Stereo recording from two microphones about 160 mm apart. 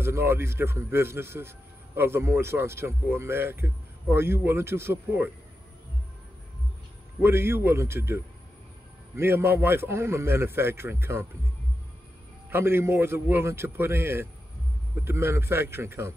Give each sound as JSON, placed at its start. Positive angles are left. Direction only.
{"t": 0.0, "sound": "a man's voice", "side_deg": -15}
{"t": 7.2, "sound": "a man's voice", "side_deg": -15}
{"t": 12.4, "sound": "a man's voice", "side_deg": -15}